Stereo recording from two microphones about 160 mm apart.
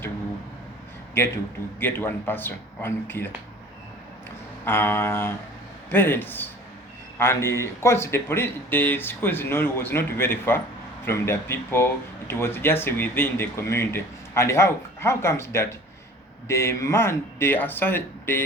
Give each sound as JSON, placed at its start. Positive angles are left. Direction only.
{"t": 1.2, "sound": "speech", "side_deg": 15}
{"t": 4.6, "sound": "speech", "side_deg": 15}